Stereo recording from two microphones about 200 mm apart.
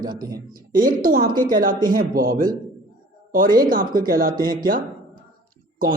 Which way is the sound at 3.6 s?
45° right (ahead or behind).